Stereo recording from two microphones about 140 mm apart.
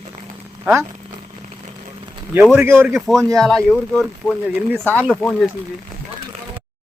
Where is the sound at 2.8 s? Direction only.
Centre (ahead or behind).